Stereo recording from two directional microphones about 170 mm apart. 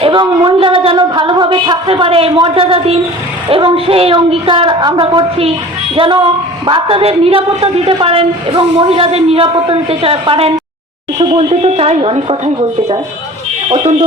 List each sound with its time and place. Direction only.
0.0 s music: 30° right (ahead or behind)
3.5 s a woman's voice: 35° right (ahead or behind)
13.7 s speech: 30° right (ahead or behind)